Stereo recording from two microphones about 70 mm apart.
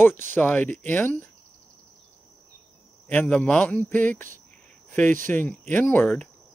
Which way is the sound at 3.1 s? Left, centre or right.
Centre.